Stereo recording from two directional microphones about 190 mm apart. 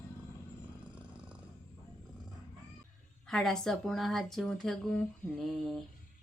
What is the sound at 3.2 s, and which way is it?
Speech, centre (ahead or behind).